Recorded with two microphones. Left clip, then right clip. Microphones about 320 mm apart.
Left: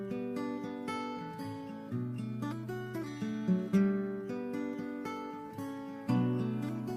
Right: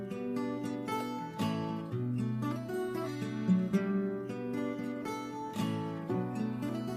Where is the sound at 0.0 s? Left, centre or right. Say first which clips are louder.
Right 1 dB; centre.